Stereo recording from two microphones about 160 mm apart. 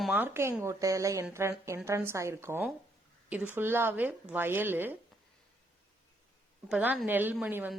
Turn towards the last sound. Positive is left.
turn(degrees=-10)  # may be behind; listen again after turning